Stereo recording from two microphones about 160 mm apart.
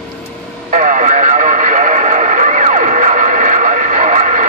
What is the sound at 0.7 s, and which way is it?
Radio, 50° right (ahead or behind).